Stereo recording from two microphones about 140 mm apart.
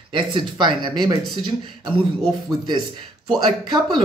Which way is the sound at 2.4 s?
30° right (ahead or behind).